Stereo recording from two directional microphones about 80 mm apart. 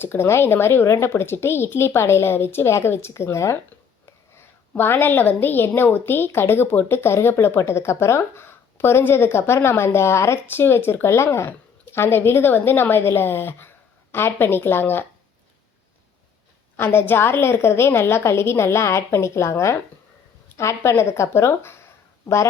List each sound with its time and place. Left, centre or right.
0.0 s speech: left
4.7 s a woman's voice: left
16.7 s a woman's voice: left